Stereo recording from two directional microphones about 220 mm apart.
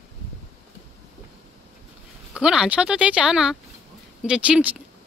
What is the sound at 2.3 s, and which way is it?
Speech, 5° right (ahead or behind).